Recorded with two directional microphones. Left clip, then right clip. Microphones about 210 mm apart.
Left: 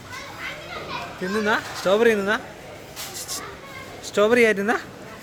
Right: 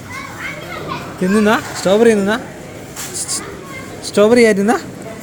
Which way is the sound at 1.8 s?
15° left (ahead or behind).